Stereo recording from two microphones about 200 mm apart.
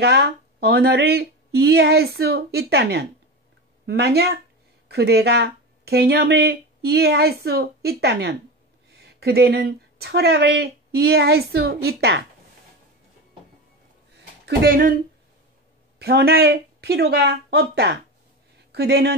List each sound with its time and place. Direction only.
0.0 s speech: 55° right (ahead or behind)
14.4 s speech: 50° right (ahead or behind)
16.0 s speech: 50° right (ahead or behind)